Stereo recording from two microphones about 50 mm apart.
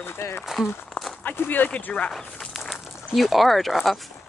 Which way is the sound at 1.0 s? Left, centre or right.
Left.